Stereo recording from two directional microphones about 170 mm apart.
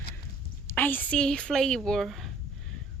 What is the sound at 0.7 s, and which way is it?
A woman's voice, 10° left (ahead or behind).